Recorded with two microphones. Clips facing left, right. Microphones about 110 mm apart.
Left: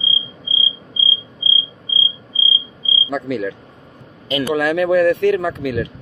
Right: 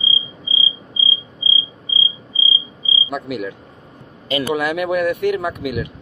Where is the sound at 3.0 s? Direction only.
15° right (ahead or behind).